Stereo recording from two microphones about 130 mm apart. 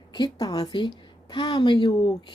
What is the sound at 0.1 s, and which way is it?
A woman's voice, 30° left (ahead or behind).